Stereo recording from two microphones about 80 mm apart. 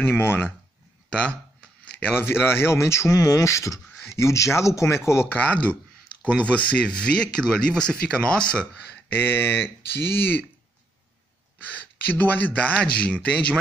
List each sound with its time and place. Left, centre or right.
0.2 s speech: left
2.2 s speech: left
5.3 s speech: centre
9.1 s speech: left
11.7 s speech: centre